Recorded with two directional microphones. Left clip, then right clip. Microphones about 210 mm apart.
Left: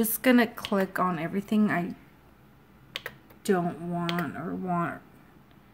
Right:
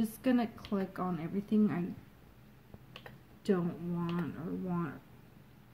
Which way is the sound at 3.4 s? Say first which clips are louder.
Left 7 dB; 20° left (ahead or behind).